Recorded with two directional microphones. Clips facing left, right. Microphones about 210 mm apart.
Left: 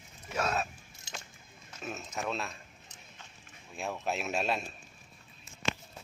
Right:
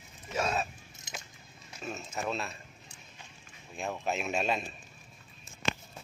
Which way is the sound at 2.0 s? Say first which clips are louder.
Right 1 dB; centre (ahead or behind).